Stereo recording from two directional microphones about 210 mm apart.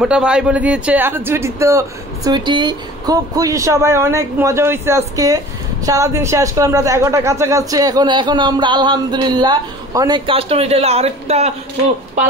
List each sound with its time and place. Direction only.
0.0 s a man's voice: 5° right (ahead or behind); by 11.5 s 30° right (ahead or behind)